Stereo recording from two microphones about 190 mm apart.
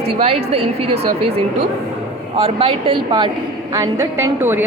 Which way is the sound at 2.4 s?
30° right (ahead or behind).